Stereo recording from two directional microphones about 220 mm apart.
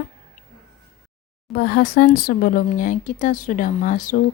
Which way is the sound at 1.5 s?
40° left (ahead or behind).